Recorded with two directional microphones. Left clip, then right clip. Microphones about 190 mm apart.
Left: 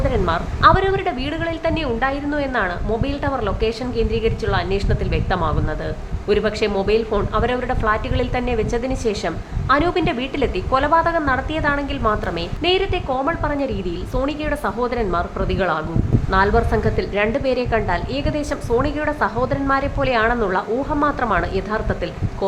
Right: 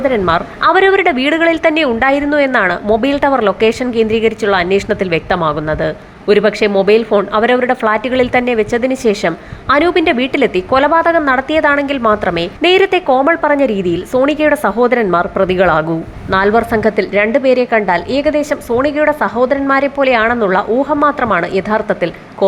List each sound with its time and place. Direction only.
0.0 s a woman's voice: 20° right (ahead or behind)